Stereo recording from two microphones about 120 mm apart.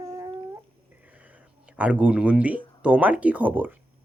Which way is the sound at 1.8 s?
10° right (ahead or behind).